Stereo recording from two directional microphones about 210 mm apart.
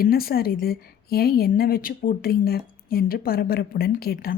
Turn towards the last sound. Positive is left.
turn(degrees=45)  # may be behind; listen again after turning